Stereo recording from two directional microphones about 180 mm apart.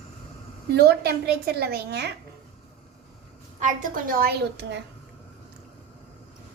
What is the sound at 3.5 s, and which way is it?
A woman's voice, 45° right (ahead or behind).